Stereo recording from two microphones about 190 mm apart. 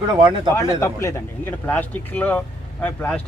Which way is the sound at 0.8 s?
15° left (ahead or behind).